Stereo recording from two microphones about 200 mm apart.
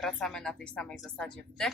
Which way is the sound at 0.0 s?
Centre (ahead or behind).